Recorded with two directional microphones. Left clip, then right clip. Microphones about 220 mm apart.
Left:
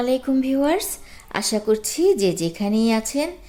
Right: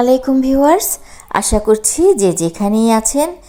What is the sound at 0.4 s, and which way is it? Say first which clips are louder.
Speech: right 11 dB; 15° right (ahead or behind).